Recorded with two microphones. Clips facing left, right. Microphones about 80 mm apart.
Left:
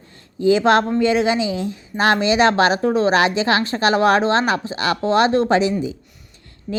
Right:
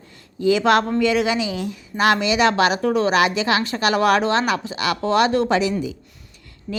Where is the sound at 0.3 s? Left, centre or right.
Left.